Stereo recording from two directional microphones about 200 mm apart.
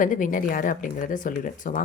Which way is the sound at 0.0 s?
40° left (ahead or behind).